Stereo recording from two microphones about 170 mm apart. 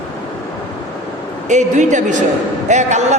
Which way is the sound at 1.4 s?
45° right (ahead or behind).